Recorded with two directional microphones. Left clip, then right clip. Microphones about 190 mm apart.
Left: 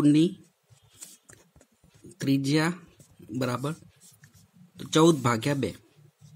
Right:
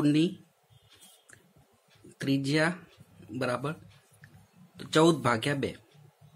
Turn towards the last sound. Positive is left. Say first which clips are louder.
# left 1 dB
turn(degrees=40)  # may be behind; listen again after turning